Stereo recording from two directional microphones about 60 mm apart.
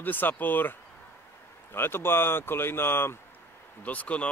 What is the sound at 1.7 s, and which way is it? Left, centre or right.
Speech, left.